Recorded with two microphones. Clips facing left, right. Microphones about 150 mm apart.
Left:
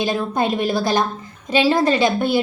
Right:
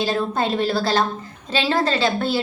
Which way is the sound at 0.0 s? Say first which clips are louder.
Left 1 dB; 15° left (ahead or behind).